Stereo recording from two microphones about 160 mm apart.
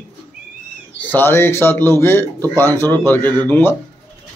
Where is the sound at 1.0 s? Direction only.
15° left (ahead or behind).